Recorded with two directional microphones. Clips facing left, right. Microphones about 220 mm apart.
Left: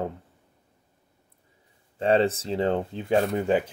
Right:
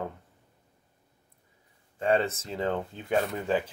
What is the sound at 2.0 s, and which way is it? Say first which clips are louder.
Speech: left 4 dB; 30° left (ahead or behind).